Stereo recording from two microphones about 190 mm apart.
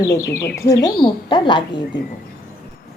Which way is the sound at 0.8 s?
25° left (ahead or behind).